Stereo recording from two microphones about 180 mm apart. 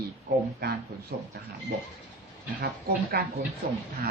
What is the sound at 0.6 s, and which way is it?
Speech, 65° right (ahead or behind).